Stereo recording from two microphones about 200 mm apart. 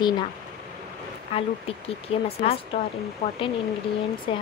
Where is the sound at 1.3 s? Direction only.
30° left (ahead or behind).